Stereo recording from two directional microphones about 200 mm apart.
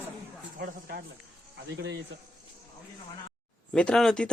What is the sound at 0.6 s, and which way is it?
Speech, 50° right (ahead or behind).